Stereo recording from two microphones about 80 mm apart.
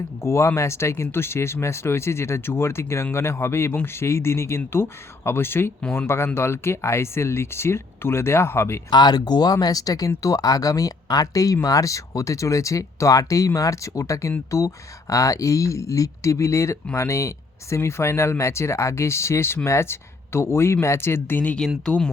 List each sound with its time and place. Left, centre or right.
0.2 s speech: left
8.9 s speech: left
21.8 s speech: centre